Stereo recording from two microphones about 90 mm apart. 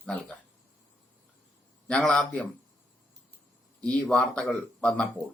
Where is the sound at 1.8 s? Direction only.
10° left (ahead or behind).